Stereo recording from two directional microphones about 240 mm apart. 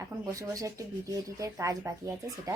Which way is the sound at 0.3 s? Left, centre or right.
Centre.